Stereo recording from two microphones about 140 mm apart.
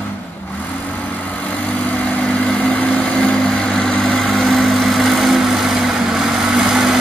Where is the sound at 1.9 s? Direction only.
10° left (ahead or behind).